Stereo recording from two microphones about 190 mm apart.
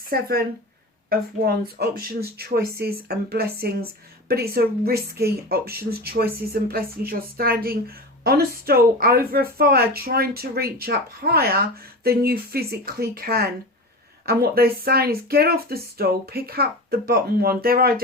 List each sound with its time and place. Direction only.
0.1 s a woman's voice: 50° right (ahead or behind)